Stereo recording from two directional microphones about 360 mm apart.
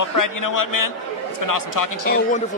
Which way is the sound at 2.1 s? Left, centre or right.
Left.